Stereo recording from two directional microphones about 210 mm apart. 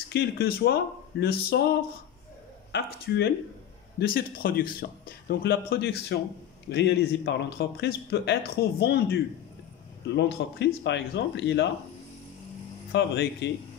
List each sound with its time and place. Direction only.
0.1 s a man's voice: 50° left (ahead or behind)
2.7 s a man's voice: 50° left (ahead or behind)
12.9 s a man's voice: 55° left (ahead or behind)